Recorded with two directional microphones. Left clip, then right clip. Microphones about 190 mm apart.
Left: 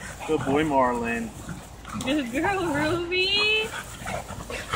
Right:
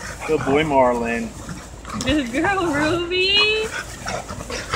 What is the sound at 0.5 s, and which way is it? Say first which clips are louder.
Speech: right 6 dB; 40° right (ahead or behind).